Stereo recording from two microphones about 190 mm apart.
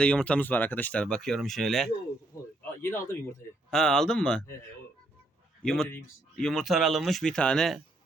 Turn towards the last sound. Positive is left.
turn(degrees=0)  # may be behind; listen again after turning